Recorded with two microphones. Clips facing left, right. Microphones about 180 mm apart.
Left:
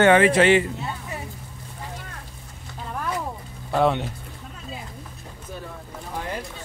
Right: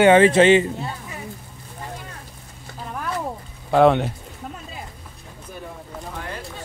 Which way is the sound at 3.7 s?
60° right (ahead or behind).